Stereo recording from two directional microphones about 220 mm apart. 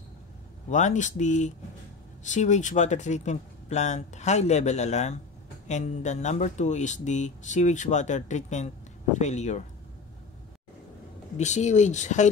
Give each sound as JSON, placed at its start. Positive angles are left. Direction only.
{"t": 0.7, "sound": "speech", "side_deg": 35}
{"t": 11.3, "sound": "speech", "side_deg": 30}